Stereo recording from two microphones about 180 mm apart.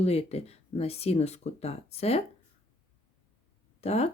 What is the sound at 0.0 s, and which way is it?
Speech, 35° left (ahead or behind).